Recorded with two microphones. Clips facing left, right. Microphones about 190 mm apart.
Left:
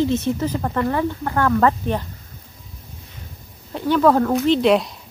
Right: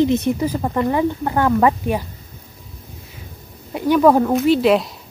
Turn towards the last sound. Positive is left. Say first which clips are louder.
# right 1 dB
turn(degrees=0)  # may be behind; listen again after turning